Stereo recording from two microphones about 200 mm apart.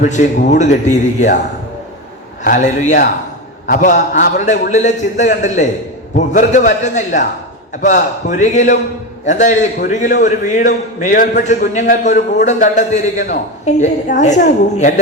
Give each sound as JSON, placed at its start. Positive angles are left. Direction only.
{"t": 0.0, "sound": "a man's voice", "side_deg": 40}
{"t": 2.4, "sound": "a man's voice", "side_deg": 40}